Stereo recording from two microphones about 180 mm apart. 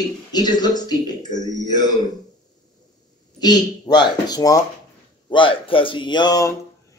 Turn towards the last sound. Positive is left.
turn(degrees=20)  # may be behind; listen again after turning